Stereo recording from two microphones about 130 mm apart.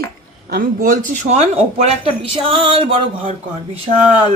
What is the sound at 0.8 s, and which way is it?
Speech, 90° right.